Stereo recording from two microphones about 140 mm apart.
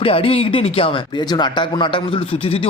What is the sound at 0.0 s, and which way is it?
Speech, 40° left (ahead or behind).